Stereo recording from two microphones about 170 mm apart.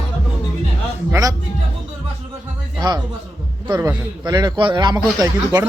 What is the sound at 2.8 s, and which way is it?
Speech, 25° right (ahead or behind).